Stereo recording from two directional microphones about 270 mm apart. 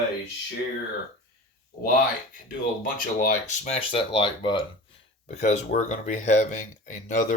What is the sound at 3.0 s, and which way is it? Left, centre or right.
Speech, left.